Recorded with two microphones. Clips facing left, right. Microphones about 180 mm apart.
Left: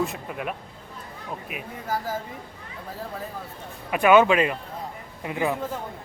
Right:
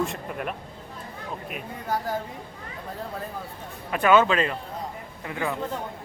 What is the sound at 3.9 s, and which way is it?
Speech, 10° left (ahead or behind).